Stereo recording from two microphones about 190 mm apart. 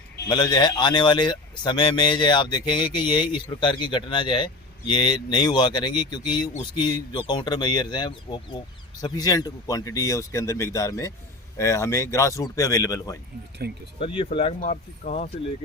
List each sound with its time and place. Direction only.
0.3 s speech: 20° left (ahead or behind); by 15.3 s 40° left (ahead or behind)